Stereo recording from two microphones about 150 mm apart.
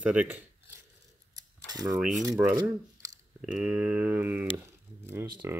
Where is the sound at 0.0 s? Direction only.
10° right (ahead or behind).